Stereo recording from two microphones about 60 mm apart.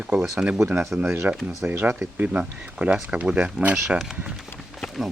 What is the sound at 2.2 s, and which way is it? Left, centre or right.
Speech, right.